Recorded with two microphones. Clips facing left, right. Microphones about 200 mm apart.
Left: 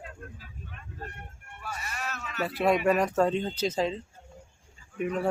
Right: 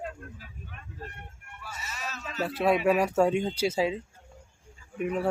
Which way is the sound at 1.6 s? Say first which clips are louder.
Left 3 dB; 60° left (ahead or behind).